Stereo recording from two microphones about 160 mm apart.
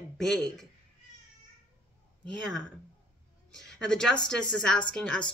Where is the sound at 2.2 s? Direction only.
5° left (ahead or behind).